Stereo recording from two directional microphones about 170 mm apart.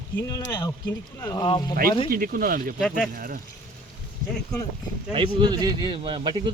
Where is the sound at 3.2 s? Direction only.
55° right (ahead or behind).